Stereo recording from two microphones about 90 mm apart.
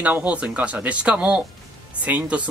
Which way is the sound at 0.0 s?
15° right (ahead or behind).